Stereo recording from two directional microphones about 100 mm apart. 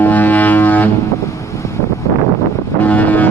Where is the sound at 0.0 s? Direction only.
20° left (ahead or behind).